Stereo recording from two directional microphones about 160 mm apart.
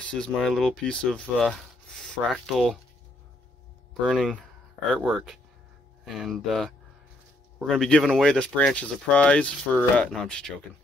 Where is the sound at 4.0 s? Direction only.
Centre (ahead or behind).